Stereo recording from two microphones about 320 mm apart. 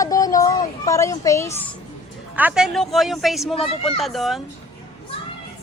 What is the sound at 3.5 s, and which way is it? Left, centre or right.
Speech, centre.